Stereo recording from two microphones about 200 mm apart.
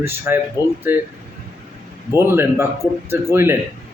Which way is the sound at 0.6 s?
15° left (ahead or behind).